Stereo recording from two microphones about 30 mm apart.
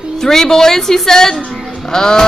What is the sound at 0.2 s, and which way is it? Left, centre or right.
Speech, centre.